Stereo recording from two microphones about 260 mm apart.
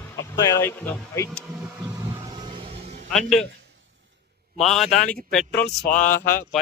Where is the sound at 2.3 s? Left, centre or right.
Right.